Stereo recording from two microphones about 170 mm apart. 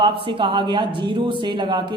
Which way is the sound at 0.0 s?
30° right (ahead or behind).